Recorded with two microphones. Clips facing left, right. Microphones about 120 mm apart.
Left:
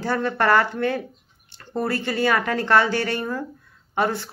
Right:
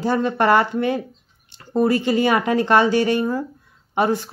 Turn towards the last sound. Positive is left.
turn(degrees=-15)  # may be behind; listen again after turning